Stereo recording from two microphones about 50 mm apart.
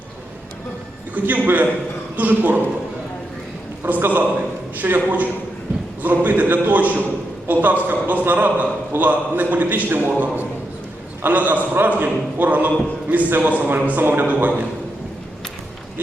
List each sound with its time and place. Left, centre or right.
1.1 s a man's voice: right
3.8 s a man's voice: right